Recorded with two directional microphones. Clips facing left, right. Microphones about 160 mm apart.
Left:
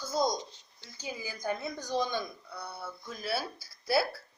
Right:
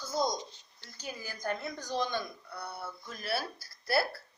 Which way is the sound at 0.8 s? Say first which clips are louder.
Left 2 dB; 10° left (ahead or behind).